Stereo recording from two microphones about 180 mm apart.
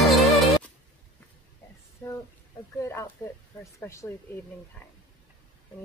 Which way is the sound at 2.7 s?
15° left (ahead or behind).